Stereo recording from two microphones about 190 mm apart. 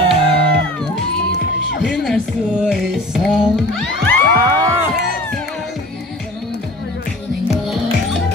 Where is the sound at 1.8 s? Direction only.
Centre (ahead or behind).